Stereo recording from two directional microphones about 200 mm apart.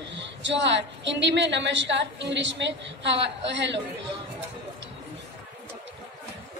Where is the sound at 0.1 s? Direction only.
65° right (ahead or behind).